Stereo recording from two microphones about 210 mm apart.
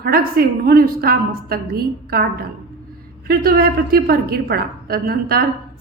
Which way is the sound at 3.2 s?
45° right (ahead or behind).